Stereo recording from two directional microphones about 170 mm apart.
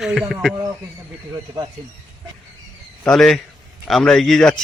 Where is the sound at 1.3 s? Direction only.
20° right (ahead or behind).